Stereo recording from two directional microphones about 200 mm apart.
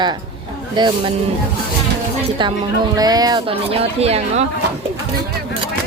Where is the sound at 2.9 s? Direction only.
20° right (ahead or behind).